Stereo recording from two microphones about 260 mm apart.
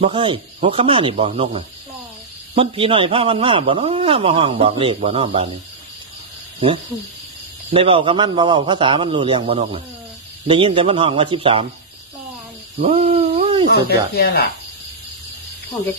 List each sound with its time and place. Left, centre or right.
0.0 s a man's voice: centre
7.7 s a man's voice: right
12.7 s owl: right
13.7 s speech: left